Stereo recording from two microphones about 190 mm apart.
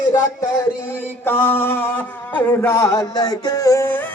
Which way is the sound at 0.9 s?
10° left (ahead or behind).